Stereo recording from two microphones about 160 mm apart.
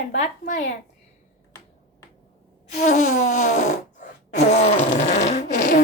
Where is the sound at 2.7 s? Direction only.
50° left (ahead or behind).